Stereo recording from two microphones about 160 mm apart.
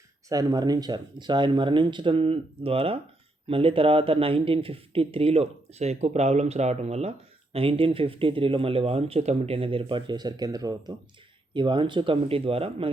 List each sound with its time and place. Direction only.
0.3 s speech: 25° right (ahead or behind)